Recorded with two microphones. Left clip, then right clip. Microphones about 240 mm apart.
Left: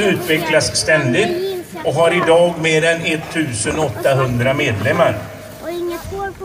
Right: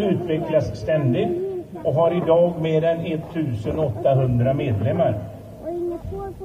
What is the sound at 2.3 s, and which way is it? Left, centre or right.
Speech, left.